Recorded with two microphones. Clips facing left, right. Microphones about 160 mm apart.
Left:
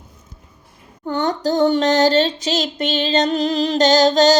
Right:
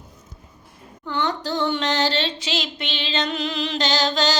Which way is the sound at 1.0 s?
45° left (ahead or behind).